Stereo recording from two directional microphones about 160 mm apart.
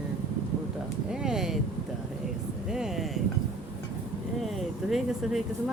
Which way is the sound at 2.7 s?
5° right (ahead or behind).